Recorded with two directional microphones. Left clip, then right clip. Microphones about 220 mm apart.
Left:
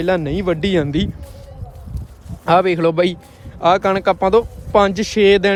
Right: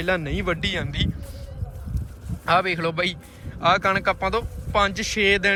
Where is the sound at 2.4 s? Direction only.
25° left (ahead or behind).